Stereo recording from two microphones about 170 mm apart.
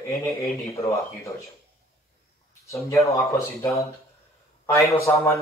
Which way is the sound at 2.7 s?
15° left (ahead or behind).